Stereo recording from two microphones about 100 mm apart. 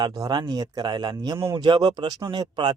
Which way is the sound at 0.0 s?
45° right (ahead or behind).